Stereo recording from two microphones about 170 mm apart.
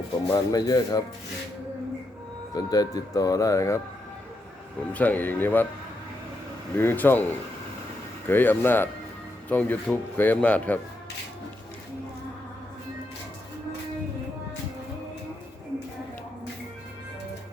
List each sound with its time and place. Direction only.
0.3 s speech: 20° left (ahead or behind)
2.6 s speech: 20° left (ahead or behind)
4.9 s a man's voice: 10° left (ahead or behind)
6.7 s a man's voice: 10° left (ahead or behind)
8.3 s a man's voice: 10° left (ahead or behind)